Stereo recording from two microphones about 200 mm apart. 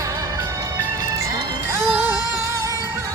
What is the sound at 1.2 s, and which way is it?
Music, 10° right (ahead or behind).